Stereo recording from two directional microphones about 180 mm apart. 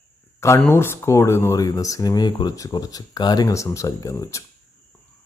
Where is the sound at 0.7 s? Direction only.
15° left (ahead or behind).